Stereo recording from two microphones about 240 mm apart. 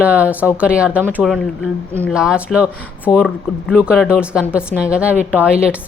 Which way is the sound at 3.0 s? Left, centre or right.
Centre.